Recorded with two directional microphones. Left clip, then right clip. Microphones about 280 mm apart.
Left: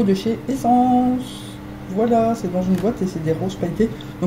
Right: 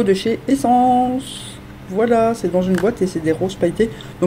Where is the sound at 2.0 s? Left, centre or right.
Right.